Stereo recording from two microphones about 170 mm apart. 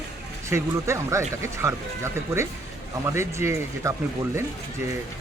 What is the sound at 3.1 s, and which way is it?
Speech, 15° right (ahead or behind).